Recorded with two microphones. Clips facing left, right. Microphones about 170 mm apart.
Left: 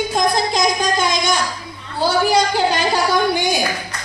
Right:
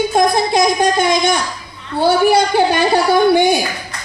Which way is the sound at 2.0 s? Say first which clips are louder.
Right 4 dB; 60° right (ahead or behind).